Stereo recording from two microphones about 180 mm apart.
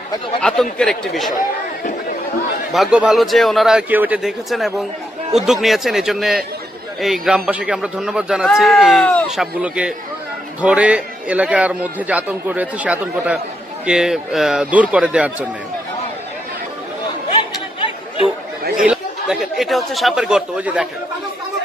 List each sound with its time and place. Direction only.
0.4 s speech: 5° left (ahead or behind)
2.7 s a man's voice: 5° right (ahead or behind)
17.7 s chatter: 30° left (ahead or behind)
18.9 s speech: centre (ahead or behind)